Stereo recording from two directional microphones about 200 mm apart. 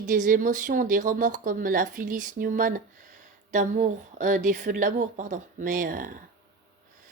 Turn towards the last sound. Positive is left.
turn(degrees=-45)  # may be behind; listen again after turning